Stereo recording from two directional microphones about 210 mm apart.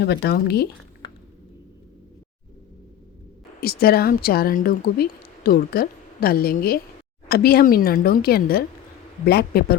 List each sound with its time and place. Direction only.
0.0 s speech: 50° left (ahead or behind)
3.6 s speech: 45° left (ahead or behind)